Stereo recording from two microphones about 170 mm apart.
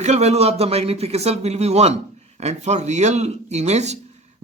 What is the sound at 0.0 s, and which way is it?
A man's voice, 40° right (ahead or behind).